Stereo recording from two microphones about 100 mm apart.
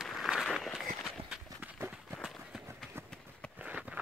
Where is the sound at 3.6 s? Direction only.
15° right (ahead or behind).